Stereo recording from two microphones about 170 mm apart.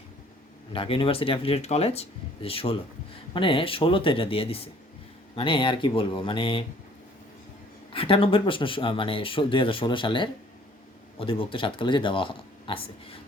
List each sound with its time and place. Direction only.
0.7 s speech: 30° left (ahead or behind)
7.9 s speech: 30° left (ahead or behind)